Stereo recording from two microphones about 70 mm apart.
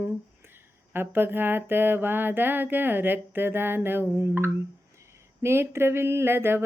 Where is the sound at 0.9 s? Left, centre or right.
Right.